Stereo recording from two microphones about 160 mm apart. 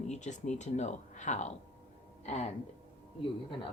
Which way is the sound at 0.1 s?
50° left (ahead or behind).